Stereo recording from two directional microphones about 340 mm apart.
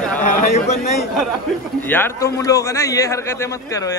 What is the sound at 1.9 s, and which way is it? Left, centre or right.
A man's voice, centre.